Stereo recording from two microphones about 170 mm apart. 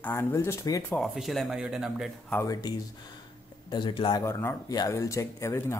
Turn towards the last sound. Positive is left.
turn(degrees=15)  # may be behind; listen again after turning